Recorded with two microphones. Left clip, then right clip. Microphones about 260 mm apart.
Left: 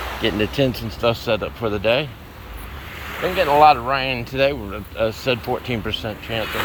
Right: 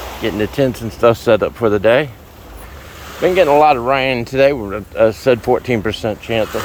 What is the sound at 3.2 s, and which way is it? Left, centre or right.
Speech, right.